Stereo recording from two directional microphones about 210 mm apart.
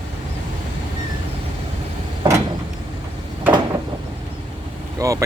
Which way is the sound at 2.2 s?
20° right (ahead or behind).